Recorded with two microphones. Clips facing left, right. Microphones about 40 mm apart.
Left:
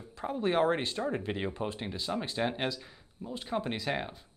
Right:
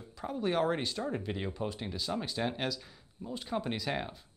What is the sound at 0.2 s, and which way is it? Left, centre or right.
Speech, centre.